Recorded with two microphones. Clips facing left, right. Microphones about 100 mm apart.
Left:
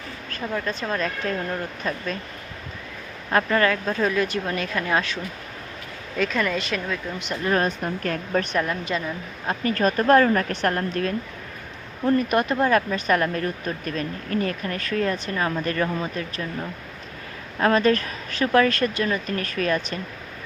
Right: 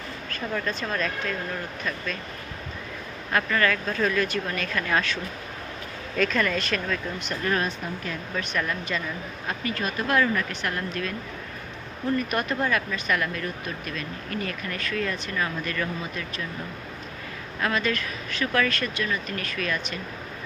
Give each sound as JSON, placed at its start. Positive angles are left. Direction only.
{"t": 0.5, "sound": "speech", "side_deg": 20}
{"t": 3.3, "sound": "speech", "side_deg": 30}
{"t": 6.1, "sound": "speech", "side_deg": 10}
{"t": 8.0, "sound": "speech", "side_deg": 45}
{"t": 8.5, "sound": "speech", "side_deg": 25}
{"t": 9.5, "sound": "speech", "side_deg": 40}
{"t": 10.8, "sound": "speech", "side_deg": 40}
{"t": 12.3, "sound": "speech", "side_deg": 25}
{"t": 12.6, "sound": "speech", "side_deg": 35}
{"t": 17.6, "sound": "speech", "side_deg": 35}